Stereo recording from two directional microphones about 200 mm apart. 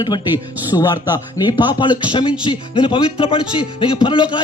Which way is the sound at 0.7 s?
20° left (ahead or behind).